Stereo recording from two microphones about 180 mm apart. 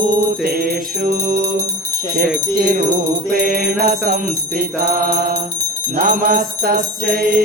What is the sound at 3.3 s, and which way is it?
Jingle bell, 50° right (ahead or behind).